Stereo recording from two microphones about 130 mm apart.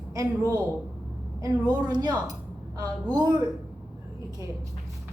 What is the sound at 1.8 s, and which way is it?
A woman's voice, 30° right (ahead or behind).